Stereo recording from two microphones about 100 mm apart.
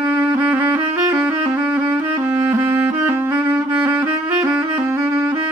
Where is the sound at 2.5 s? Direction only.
25° right (ahead or behind).